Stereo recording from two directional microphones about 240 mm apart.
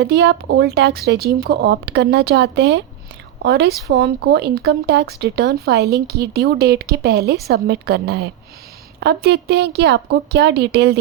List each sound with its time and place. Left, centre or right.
0.0 s speech: right